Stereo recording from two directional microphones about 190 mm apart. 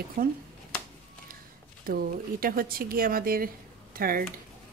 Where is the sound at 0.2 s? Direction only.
50° right (ahead or behind).